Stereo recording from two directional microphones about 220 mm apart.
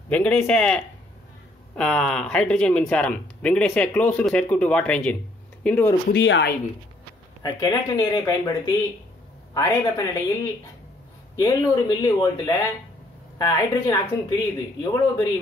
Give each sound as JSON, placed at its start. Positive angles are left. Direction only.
{"t": 0.1, "sound": "speech", "side_deg": 5}
{"t": 6.0, "sound": "a woman's voice", "side_deg": 55}
{"t": 7.4, "sound": "speech", "side_deg": 15}
{"t": 11.3, "sound": "speech", "side_deg": 20}